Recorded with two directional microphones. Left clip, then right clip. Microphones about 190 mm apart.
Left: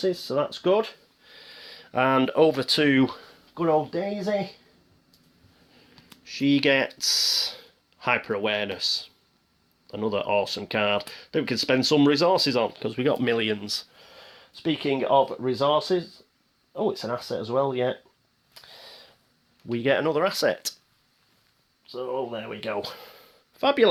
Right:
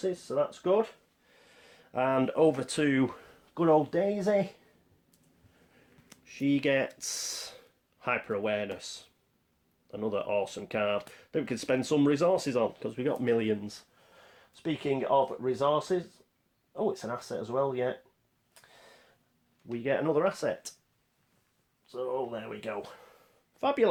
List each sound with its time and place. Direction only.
0.0 s speech: 45° left (ahead or behind)
1.3 s speech: 35° left (ahead or behind)
3.5 s speech: 25° right (ahead or behind)
6.2 s speech: 25° left (ahead or behind)
19.7 s speech: 45° left (ahead or behind)
21.9 s speech: 20° left (ahead or behind)
22.7 s speech: 45° left (ahead or behind)
23.6 s speech: 25° left (ahead or behind)